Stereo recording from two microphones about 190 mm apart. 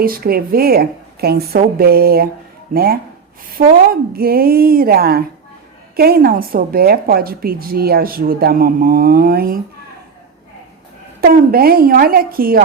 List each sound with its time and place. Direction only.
0.0 s a woman's voice: 50° right (ahead or behind)
11.2 s a woman's voice: 50° right (ahead or behind)